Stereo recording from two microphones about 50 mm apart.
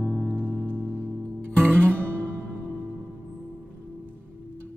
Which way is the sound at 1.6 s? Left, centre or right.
Right.